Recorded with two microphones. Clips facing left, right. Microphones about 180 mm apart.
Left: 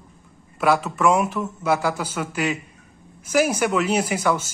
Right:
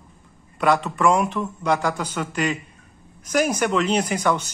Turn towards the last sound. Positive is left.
turn(degrees=5)  # may be behind; listen again after turning